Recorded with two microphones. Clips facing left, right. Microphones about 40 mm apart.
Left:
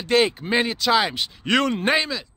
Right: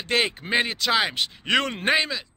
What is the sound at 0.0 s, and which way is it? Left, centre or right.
Speech, right.